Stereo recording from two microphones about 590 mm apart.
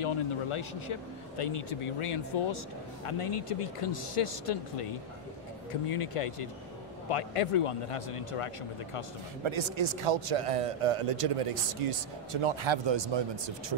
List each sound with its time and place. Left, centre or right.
0.0 s speech: left
5.9 s speech: left
9.4 s speech: right